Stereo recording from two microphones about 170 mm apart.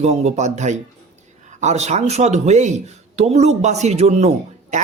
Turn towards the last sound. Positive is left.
turn(degrees=-40)  # may be behind; listen again after turning